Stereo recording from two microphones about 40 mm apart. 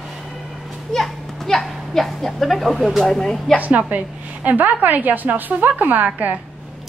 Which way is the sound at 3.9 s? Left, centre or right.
Right.